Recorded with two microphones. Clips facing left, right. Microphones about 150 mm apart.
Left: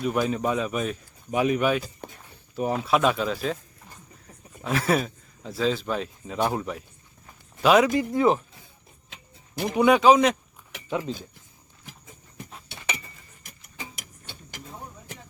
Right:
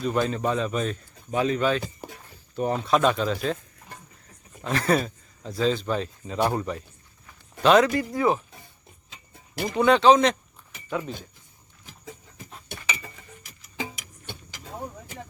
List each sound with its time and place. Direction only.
0.0 s a man's voice: 5° left (ahead or behind)
2.0 s a sound: 5° right (ahead or behind)
2.6 s speech: 5° left (ahead or behind)
4.6 s speech: 5° left (ahead or behind)
7.9 s speech: 20° left (ahead or behind)
9.7 s a man's voice: 10° left (ahead or behind)
10.8 s speech: 20° left (ahead or behind)
12.7 s a sound: 50° right (ahead or behind)